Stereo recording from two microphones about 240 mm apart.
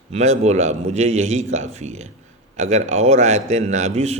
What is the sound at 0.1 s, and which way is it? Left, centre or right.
A man's voice, right.